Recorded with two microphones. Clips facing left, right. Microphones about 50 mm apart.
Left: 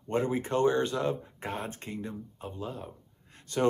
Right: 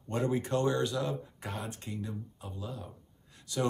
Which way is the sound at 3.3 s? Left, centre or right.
Left.